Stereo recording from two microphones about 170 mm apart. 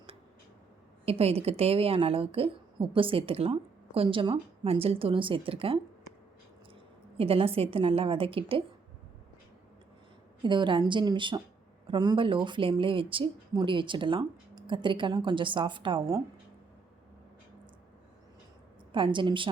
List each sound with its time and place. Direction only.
1.0 s a woman's voice: 35° right (ahead or behind)
7.2 s a woman's voice: 35° right (ahead or behind)
10.4 s speech: 30° right (ahead or behind)
18.9 s speech: 30° right (ahead or behind)